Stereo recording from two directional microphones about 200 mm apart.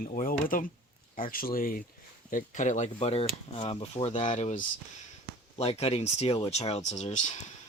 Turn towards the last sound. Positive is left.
turn(degrees=35)  # may be behind; listen again after turning